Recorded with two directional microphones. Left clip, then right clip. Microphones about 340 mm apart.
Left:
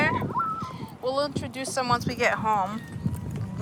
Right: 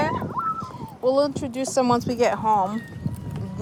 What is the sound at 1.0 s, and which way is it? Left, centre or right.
A child's voice, right.